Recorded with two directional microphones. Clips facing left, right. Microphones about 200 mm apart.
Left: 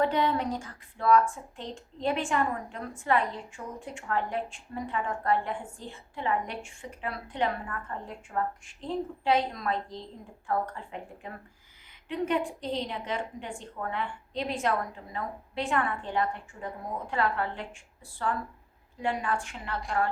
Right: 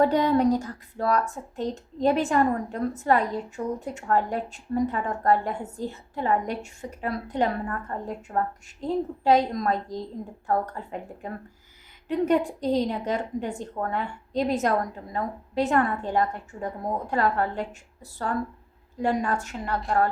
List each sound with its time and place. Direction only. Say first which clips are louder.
0.0 s speech: right 6 dB; 40° right (ahead or behind)
19.0 s speech: right 5 dB; 40° right (ahead or behind)